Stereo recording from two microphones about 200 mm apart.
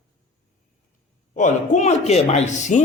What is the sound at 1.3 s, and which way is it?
Speech, 35° left (ahead or behind).